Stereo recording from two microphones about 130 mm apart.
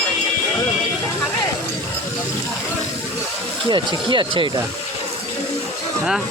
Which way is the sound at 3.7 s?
40° right (ahead or behind).